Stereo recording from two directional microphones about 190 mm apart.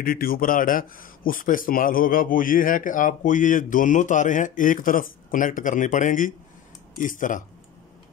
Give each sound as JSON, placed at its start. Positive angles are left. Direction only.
{"t": 0.0, "sound": "speech", "side_deg": 50}